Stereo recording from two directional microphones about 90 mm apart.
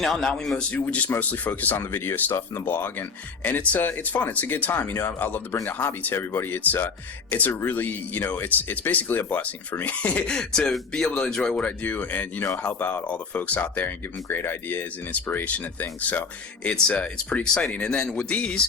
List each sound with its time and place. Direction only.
0.0 s a man's voice: 5° left (ahead or behind)